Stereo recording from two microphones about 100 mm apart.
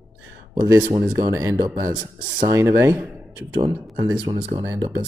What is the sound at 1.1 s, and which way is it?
Speech, 35° right (ahead or behind).